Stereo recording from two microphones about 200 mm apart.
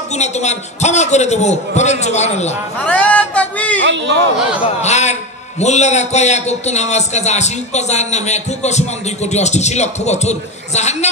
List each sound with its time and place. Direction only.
0.1 s a man's voice: 35° left (ahead or behind)
2.8 s speech: 5° left (ahead or behind)
3.8 s speech: 65° right (ahead or behind)
4.6 s a man's voice: 35° left (ahead or behind)